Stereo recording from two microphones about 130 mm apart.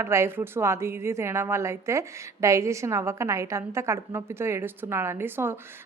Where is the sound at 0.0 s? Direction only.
20° right (ahead or behind).